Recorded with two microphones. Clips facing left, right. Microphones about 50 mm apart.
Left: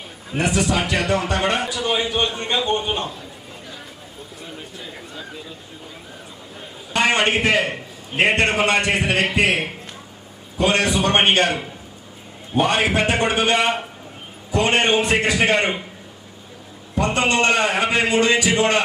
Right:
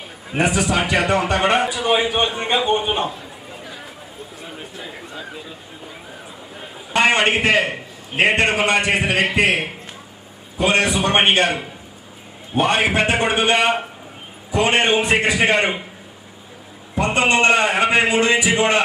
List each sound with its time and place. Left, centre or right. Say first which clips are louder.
0.3 s a man's voice: right 1 dB; centre
4.4 s a sound: right 2 dB; centre
6.6 s a man's voice: right 3 dB; centre
16.9 s a man's voice: right 2 dB; centre